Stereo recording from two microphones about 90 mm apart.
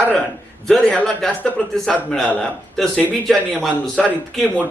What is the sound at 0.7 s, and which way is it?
A man's voice, 5° left (ahead or behind).